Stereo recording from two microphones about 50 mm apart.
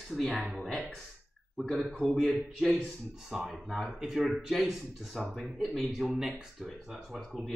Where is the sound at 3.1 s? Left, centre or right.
Centre.